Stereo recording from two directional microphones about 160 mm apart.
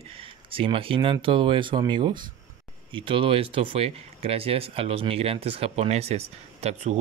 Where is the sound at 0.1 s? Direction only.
35° right (ahead or behind).